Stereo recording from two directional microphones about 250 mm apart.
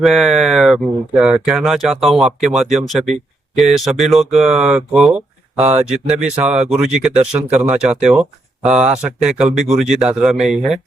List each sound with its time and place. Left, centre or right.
0.0 s speech: centre
5.5 s speech: right
5.9 s speech: centre